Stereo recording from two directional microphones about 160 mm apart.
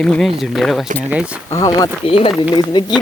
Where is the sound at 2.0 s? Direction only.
35° left (ahead or behind).